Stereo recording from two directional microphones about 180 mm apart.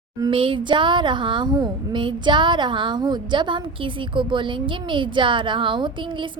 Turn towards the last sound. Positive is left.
turn(degrees=-25)  # may be behind; listen again after turning